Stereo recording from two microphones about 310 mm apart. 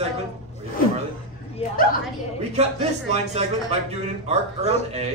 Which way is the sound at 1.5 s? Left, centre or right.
Left.